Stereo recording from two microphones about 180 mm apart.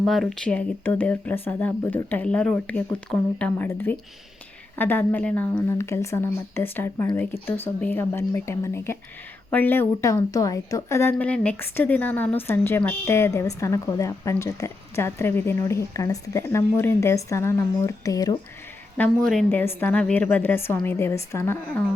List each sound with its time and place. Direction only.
0.0 s a woman's voice: centre (ahead or behind); by 18.3 s 20° left (ahead or behind)
18.9 s a woman's voice: 5° left (ahead or behind)